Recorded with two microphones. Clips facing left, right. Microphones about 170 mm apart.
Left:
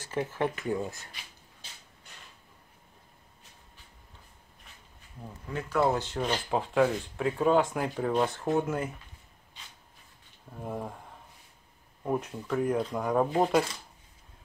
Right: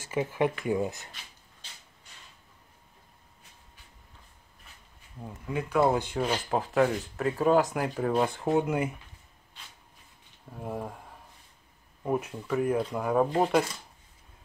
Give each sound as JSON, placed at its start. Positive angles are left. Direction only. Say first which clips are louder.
{"t": 0.0, "sound": "speech", "louder": "right 3 dB", "side_deg": -10}
{"t": 5.2, "sound": "speech", "louder": "right 4 dB", "side_deg": -15}
{"t": 10.5, "sound": "speech", "louder": "right 1 dB", "side_deg": 0}